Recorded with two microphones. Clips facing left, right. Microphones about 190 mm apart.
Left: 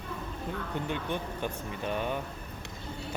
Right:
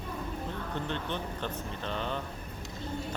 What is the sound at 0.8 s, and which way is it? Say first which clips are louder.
Speech: left 2 dB; 10° left (ahead or behind).